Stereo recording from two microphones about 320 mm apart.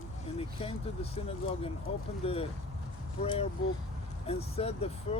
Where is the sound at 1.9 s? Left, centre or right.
Centre.